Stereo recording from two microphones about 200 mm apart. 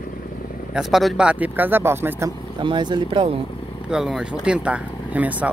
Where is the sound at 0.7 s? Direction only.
Centre (ahead or behind).